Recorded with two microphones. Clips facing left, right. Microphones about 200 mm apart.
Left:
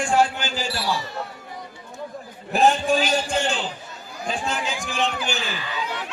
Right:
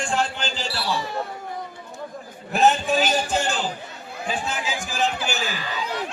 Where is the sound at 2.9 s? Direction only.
45° right (ahead or behind).